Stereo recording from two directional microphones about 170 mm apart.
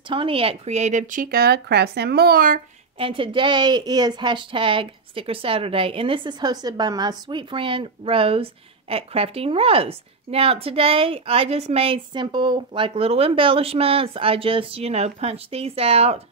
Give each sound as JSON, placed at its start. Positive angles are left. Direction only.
{"t": 0.1, "sound": "speech", "side_deg": -30}
{"t": 3.0, "sound": "a woman's voice", "side_deg": -30}